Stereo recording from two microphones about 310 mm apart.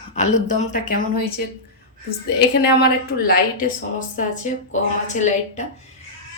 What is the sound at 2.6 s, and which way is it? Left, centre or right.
A woman's voice, left.